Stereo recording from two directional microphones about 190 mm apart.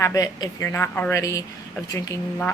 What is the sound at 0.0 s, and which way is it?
Speech, 15° left (ahead or behind).